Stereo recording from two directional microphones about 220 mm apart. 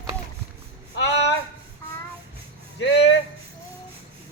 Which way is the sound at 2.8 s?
55° left (ahead or behind).